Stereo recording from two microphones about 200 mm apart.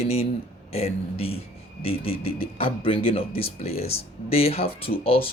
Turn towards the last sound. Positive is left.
turn(degrees=25)  # may be behind; listen again after turning